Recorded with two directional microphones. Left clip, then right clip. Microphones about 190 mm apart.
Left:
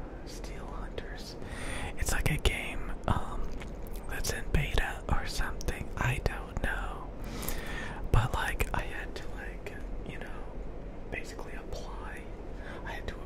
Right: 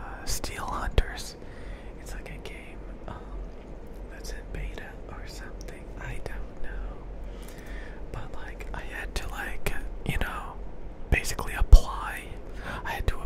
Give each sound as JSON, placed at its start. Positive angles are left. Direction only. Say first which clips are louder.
{"t": 0.4, "sound": "speech", "louder": "right 13 dB", "side_deg": -55}
{"t": 2.1, "sound": "whispering", "louder": "left 11 dB", "side_deg": 55}
{"t": 7.7, "sound": "whispering", "louder": "left 9 dB", "side_deg": 45}
{"t": 9.1, "sound": "whispering", "louder": "right 7 dB", "side_deg": -40}
{"t": 10.0, "sound": "whispering", "louder": "right 12 dB", "side_deg": -60}
{"t": 12.6, "sound": "whispering", "louder": "right 8 dB", "side_deg": -35}